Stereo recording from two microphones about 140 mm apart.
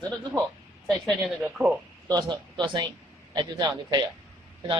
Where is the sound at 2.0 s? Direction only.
30° right (ahead or behind).